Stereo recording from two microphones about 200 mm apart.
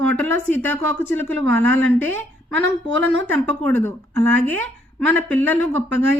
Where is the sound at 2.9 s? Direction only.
65° right (ahead or behind).